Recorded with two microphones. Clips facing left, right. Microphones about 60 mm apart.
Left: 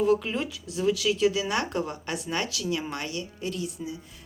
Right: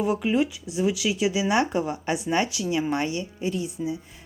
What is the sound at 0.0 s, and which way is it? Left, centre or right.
A woman's voice, centre.